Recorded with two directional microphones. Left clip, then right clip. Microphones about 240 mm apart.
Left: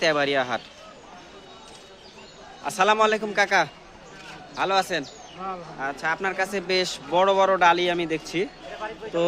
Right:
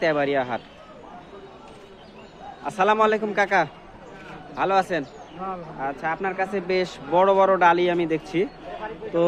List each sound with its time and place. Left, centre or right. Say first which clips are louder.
0.0 s speech: even; centre
2.6 s a man's voice: even; centre